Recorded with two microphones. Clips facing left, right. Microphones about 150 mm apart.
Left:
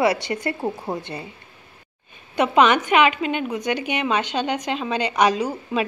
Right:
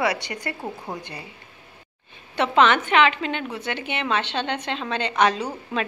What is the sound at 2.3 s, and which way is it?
A woman's voice, 15° left (ahead or behind).